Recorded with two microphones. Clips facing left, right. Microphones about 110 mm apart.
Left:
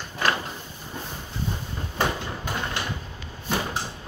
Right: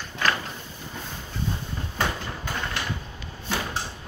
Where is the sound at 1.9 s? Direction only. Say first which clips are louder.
Left 2 dB; 15° left (ahead or behind).